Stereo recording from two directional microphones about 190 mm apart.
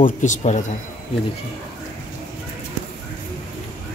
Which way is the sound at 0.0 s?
40° left (ahead or behind).